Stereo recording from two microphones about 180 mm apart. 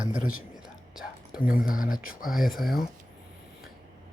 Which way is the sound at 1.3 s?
55° left (ahead or behind).